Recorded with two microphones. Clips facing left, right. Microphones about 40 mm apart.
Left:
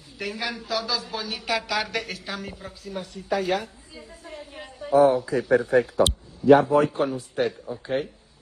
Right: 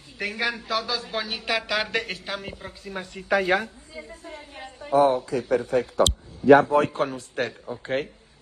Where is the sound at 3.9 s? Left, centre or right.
Right.